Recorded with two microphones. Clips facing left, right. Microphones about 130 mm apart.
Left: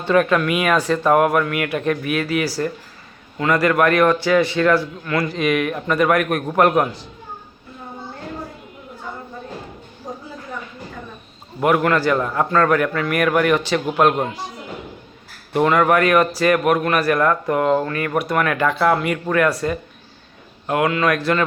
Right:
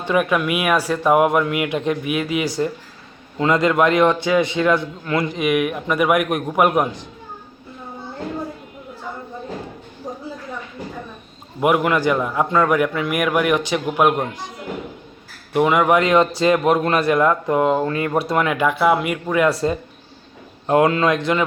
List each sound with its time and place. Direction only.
0.0 s a man's voice: 10° right (ahead or behind)
11.6 s a man's voice: 15° right (ahead or behind)
15.5 s a man's voice: 10° right (ahead or behind); by 18.4 s 25° right (ahead or behind)
18.4 s a man's voice: 15° right (ahead or behind)
19.5 s a man's voice: 25° right (ahead or behind)
21.1 s a man's voice: 20° right (ahead or behind)